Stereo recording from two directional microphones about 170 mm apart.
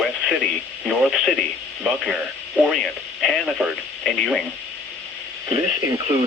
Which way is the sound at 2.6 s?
Centre (ahead or behind).